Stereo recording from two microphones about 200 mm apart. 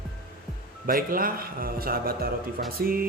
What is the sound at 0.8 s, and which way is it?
Speech, 45° right (ahead or behind).